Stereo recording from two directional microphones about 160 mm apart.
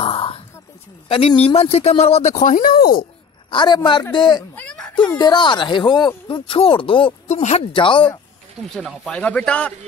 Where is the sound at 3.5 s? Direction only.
30° left (ahead or behind).